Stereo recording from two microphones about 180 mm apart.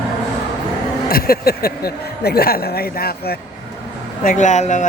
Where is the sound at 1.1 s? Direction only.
55° left (ahead or behind).